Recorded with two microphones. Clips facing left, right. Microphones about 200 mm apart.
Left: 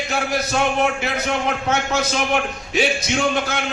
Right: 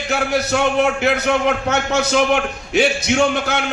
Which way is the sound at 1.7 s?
65° right (ahead or behind).